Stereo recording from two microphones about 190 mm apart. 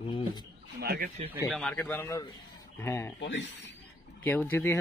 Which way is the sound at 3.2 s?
70° left (ahead or behind).